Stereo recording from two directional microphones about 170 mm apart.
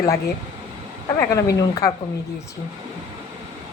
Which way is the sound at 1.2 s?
20° left (ahead or behind).